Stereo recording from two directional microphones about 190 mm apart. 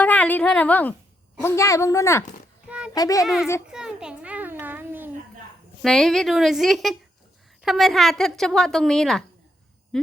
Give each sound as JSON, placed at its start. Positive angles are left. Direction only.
{"t": 0.0, "sound": "a woman's voice", "side_deg": 10}
{"t": 2.6, "sound": "child singing", "side_deg": -5}
{"t": 2.9, "sound": "a child's voice", "side_deg": 20}
{"t": 3.2, "sound": "a woman's voice", "side_deg": -5}
{"t": 3.7, "sound": "a sound", "side_deg": -5}
{"t": 5.8, "sound": "a woman's voice", "side_deg": 0}
{"t": 9.9, "sound": "a sound", "side_deg": 0}